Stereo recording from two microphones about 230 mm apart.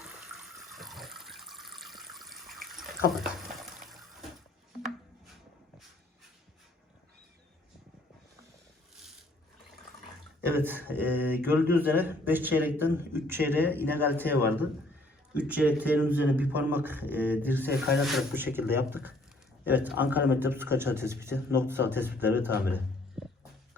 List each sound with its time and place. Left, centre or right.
0.5 s water: centre
3.1 s a sound: centre
10.4 s speech: centre